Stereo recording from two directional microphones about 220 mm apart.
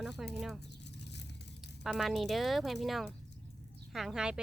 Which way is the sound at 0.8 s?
50° left (ahead or behind).